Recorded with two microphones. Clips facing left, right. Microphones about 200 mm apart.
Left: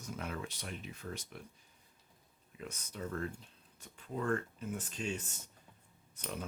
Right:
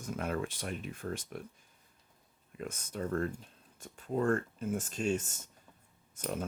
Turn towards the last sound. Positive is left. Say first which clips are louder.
# right 6 dB
turn(degrees=-45)  # may be behind; listen again after turning